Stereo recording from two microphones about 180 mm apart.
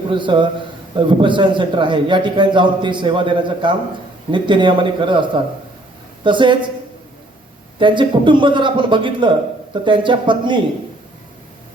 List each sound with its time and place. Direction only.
0.1 s a man's voice: 25° right (ahead or behind)
7.8 s a man's voice: 25° right (ahead or behind)